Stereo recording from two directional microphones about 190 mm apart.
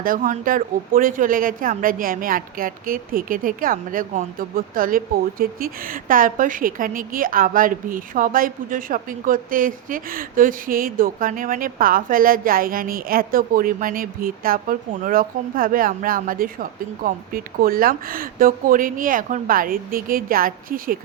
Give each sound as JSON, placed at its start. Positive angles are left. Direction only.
{"t": 0.0, "sound": "speech", "side_deg": -45}